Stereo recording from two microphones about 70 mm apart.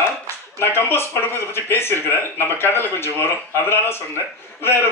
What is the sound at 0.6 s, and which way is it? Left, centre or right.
Speech, left.